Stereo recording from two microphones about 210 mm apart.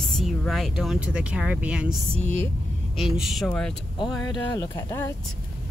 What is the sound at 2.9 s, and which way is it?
Speech, centre (ahead or behind).